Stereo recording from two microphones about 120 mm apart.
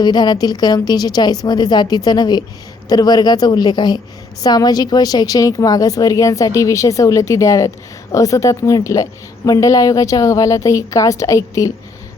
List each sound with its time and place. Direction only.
0.0 s a woman's voice: 35° left (ahead or behind)